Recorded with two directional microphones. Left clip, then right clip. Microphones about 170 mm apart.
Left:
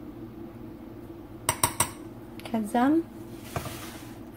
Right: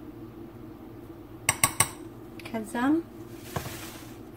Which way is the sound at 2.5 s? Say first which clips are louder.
Left 3 dB; 40° left (ahead or behind).